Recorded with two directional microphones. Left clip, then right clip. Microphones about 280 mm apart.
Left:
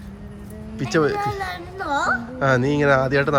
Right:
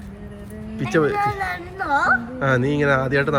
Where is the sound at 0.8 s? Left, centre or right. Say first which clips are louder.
Right 1 dB; centre.